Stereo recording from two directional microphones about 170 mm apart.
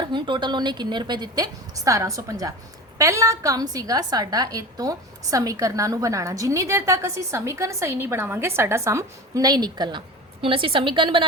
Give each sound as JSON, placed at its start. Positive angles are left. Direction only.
{"t": 0.0, "sound": "a woman's voice", "side_deg": -30}